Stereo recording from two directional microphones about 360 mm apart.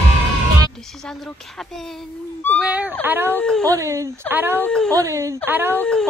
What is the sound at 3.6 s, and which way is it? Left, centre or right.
Speech, centre.